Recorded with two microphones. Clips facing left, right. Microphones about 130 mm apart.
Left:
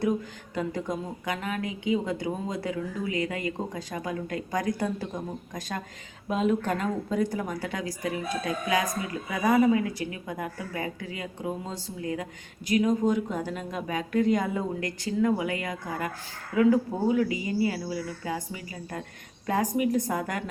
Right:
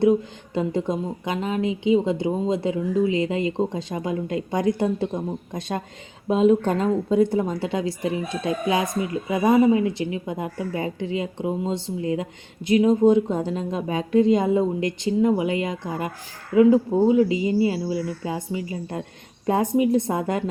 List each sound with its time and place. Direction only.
0.5 s speech: 25° right (ahead or behind)